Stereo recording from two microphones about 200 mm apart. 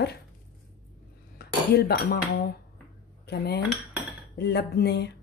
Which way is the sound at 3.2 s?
50° left (ahead or behind).